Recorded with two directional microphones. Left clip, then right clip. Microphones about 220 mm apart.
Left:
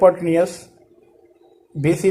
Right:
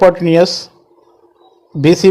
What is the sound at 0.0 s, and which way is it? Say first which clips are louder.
Speech: right 5 dB; 40° right (ahead or behind).